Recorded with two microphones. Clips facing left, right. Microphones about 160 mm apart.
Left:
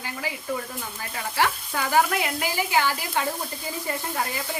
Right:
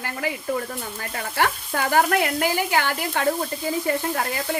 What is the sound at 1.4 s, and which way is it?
A woman's voice, 50° right (ahead or behind).